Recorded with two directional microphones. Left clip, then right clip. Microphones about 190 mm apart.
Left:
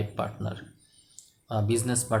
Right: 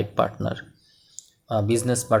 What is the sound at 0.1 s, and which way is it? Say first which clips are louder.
Speech: right 9 dB; 35° right (ahead or behind).